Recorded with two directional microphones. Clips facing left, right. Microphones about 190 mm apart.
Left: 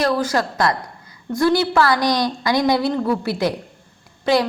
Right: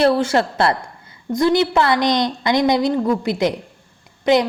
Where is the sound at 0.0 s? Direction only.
30° right (ahead or behind).